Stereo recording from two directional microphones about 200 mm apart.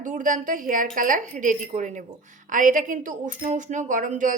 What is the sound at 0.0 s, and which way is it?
A woman's voice, 40° right (ahead or behind).